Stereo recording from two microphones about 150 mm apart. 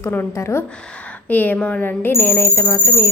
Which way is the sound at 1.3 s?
10° left (ahead or behind).